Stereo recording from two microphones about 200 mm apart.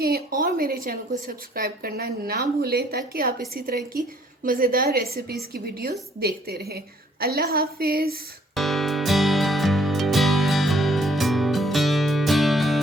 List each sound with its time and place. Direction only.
0.0 s a woman's voice: 45° right (ahead or behind)
8.5 s music: centre (ahead or behind)